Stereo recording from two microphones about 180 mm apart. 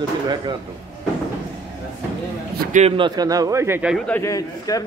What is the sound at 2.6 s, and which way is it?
Speech, 40° right (ahead or behind).